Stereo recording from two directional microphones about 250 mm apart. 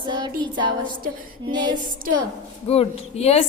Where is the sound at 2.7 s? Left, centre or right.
Left.